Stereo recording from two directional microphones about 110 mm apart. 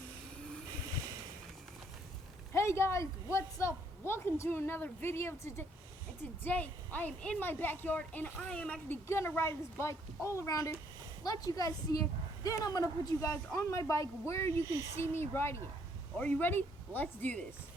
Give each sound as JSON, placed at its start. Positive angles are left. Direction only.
{"t": 2.5, "sound": "a woman's voice", "side_deg": 25}
{"t": 9.0, "sound": "a woman's voice", "side_deg": 25}
{"t": 14.7, "sound": "speech", "side_deg": -30}
{"t": 14.9, "sound": "a woman's voice", "side_deg": 25}